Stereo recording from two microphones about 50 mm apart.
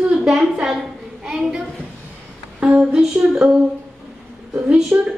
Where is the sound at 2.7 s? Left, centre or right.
Centre.